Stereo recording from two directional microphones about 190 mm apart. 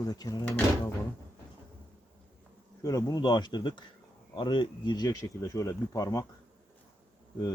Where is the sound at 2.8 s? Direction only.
20° left (ahead or behind).